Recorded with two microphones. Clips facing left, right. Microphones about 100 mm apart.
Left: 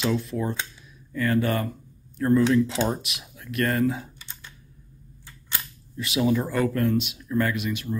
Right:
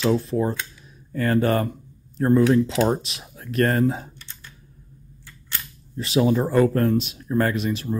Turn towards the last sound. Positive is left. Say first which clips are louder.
# right 3 dB
turn(degrees=-35)  # may be behind; listen again after turning